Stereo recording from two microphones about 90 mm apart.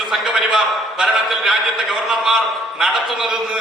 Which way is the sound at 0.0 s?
Centre (ahead or behind).